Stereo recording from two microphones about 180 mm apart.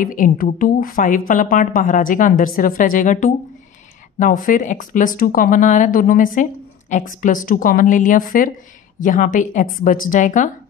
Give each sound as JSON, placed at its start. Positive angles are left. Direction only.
{"t": 0.0, "sound": "speech", "side_deg": 50}